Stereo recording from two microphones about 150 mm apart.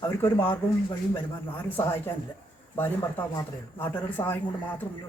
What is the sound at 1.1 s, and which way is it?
Speech, 15° left (ahead or behind).